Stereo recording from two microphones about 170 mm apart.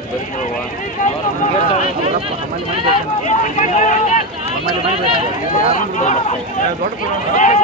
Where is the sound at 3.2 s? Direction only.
45° left (ahead or behind).